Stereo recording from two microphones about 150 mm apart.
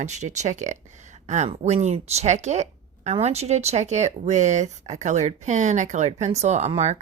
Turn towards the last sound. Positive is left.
turn(degrees=-50)  # may be behind; listen again after turning